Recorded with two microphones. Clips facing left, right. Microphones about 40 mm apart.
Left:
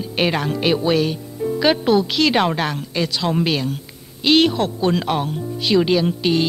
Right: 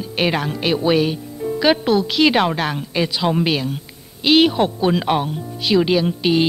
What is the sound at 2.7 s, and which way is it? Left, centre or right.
Speech, centre.